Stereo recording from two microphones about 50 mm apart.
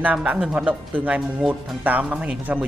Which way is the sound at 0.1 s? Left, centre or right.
Right.